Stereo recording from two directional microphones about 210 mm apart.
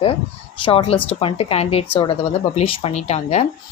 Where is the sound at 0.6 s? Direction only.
25° left (ahead or behind).